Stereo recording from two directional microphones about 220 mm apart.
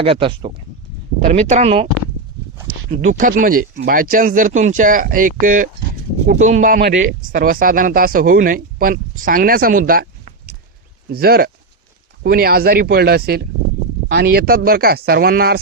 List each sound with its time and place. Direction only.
0.0 s speech: 25° right (ahead or behind)
3.0 s speech: 35° right (ahead or behind)